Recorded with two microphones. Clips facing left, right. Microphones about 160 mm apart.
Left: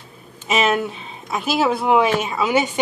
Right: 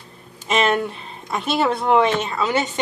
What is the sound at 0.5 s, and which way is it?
A woman's voice, 5° left (ahead or behind).